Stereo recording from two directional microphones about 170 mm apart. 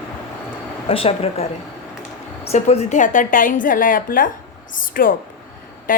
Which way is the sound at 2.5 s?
40° left (ahead or behind).